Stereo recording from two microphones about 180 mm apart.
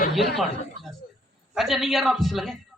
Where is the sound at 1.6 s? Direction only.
Centre (ahead or behind).